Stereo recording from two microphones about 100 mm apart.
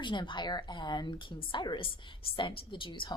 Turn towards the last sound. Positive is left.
turn(degrees=55)  # may be behind; listen again after turning